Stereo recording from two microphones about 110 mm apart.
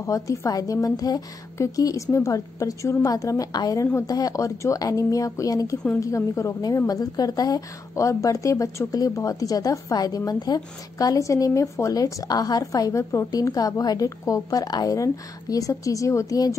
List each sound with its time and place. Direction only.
0.0 s a woman's voice: 30° left (ahead or behind)